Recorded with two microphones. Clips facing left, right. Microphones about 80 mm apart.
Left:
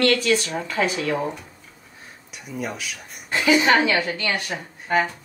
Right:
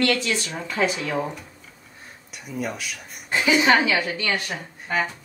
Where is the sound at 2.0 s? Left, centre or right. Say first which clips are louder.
Even; centre.